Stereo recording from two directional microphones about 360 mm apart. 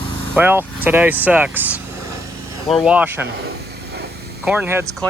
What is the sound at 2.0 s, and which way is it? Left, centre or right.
Vehicle, right.